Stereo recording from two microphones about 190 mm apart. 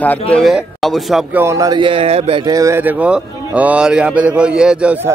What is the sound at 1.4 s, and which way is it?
Speech, 15° right (ahead or behind).